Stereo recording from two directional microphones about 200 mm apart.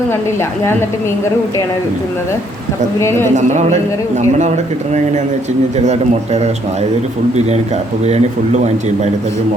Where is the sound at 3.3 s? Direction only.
35° right (ahead or behind).